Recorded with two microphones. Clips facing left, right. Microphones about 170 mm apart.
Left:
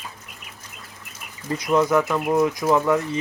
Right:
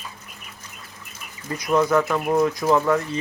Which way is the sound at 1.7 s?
15° left (ahead or behind).